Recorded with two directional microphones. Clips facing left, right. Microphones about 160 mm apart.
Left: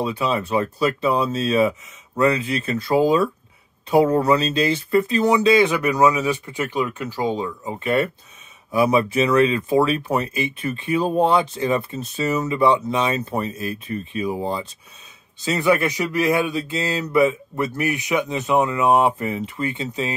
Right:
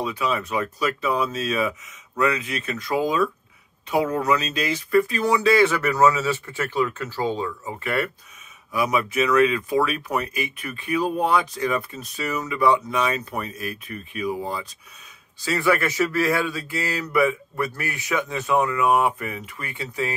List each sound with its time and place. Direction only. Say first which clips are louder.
0.0 s speech: left 3 dB; 30° left (ahead or behind)